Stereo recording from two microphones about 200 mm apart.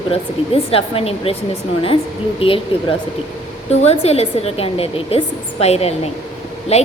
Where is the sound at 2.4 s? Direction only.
30° left (ahead or behind).